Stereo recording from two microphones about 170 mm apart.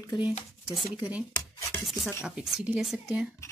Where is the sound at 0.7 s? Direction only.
10° right (ahead or behind).